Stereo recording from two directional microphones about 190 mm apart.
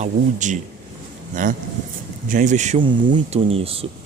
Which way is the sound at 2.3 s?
40° right (ahead or behind).